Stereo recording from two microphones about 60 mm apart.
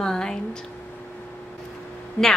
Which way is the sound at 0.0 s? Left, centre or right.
Centre.